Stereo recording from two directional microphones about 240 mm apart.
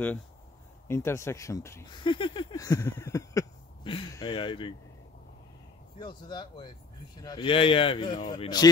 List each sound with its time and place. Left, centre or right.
0.8 s speech: centre
5.9 s speech: centre